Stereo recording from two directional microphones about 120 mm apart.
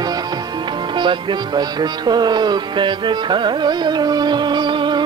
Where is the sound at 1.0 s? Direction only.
40° right (ahead or behind).